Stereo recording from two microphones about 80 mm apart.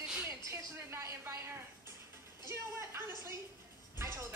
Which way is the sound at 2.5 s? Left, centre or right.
Right.